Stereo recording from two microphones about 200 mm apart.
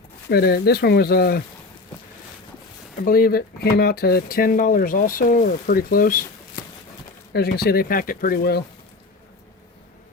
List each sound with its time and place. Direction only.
0.3 s speech: 50° left (ahead or behind)
3.0 s speech: 45° left (ahead or behind)
7.3 s speech: 50° left (ahead or behind)